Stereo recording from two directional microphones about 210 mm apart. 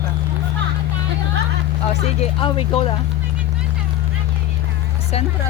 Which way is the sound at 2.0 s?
25° left (ahead or behind).